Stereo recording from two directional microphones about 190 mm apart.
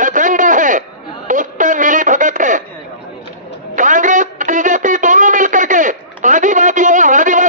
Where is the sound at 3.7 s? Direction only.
40° right (ahead or behind).